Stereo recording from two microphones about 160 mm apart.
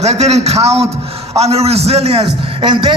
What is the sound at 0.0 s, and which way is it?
A man's voice, 45° right (ahead or behind).